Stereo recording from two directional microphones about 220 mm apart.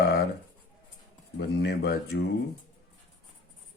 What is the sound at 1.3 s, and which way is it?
Speech, 50° left (ahead or behind).